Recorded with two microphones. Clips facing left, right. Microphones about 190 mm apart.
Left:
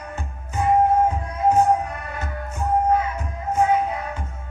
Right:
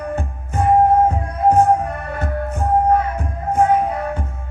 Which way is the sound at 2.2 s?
55° right (ahead or behind).